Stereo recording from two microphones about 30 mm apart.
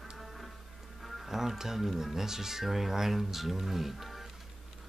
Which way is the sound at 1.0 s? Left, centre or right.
Centre.